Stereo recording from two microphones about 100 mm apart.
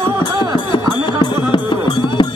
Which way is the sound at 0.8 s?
50° left (ahead or behind).